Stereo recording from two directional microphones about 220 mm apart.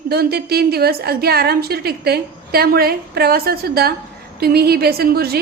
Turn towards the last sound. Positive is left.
turn(degrees=-45)  # may be behind; listen again after turning